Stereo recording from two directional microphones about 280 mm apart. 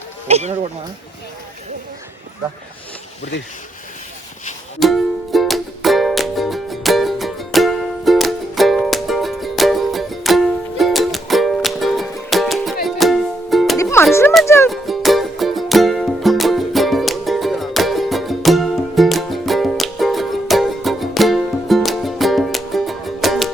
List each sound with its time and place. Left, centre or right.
0.3 s speech: right
4.8 s music: centre